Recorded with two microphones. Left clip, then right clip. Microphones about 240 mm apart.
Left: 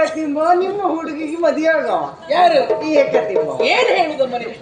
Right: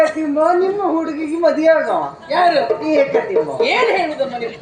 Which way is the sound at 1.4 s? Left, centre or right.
Left.